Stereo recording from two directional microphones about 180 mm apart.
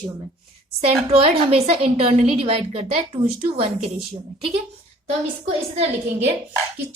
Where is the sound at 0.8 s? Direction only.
35° right (ahead or behind).